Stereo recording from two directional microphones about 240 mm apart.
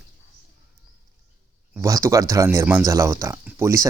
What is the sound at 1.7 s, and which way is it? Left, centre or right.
Speech, centre.